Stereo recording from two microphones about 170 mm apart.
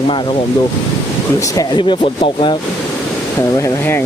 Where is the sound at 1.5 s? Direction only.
25° left (ahead or behind).